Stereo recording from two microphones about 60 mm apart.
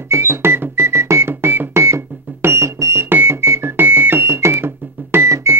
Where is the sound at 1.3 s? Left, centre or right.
Right.